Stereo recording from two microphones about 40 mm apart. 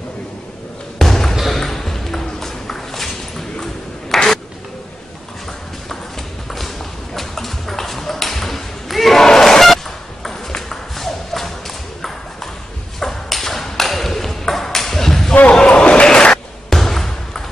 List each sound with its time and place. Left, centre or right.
0.9 s basketball bounce: centre
1.5 s a sound: centre
7.2 s ping: centre
11.0 s thump: centre
13.0 s ping: centre
15.6 s a sound: left
16.7 s basketball bounce: centre